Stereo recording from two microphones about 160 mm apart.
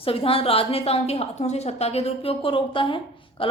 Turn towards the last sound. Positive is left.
turn(degrees=30)  # may be behind; listen again after turning